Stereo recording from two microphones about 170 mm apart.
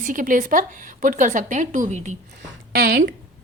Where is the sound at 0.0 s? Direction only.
50° right (ahead or behind).